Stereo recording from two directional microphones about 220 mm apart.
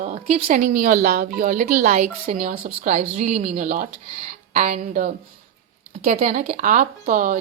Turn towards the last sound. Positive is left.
turn(degrees=-40)  # may be behind; listen again after turning